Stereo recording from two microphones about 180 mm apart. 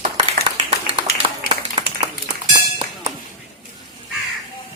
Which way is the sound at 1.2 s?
30° right (ahead or behind).